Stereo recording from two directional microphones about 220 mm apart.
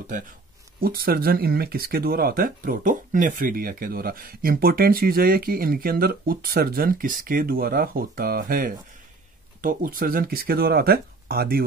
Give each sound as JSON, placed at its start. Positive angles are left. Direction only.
{"t": 0.7, "sound": "speech", "side_deg": -40}